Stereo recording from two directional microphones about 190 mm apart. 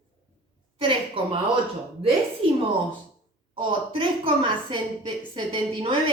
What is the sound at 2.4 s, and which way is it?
A woman's voice, 30° right (ahead or behind).